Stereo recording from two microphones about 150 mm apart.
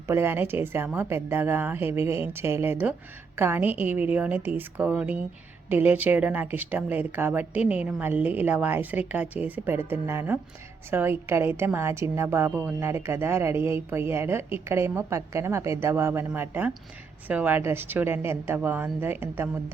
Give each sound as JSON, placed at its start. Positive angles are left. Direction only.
{"t": 0.1, "sound": "a woman's voice", "side_deg": -15}